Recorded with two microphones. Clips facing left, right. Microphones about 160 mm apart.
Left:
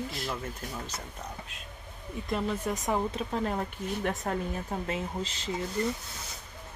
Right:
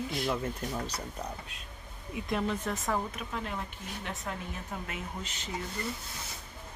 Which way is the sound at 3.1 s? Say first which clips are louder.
Left 6 dB; 35° left (ahead or behind).